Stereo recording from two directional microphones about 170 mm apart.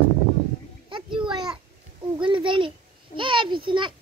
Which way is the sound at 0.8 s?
30° right (ahead or behind).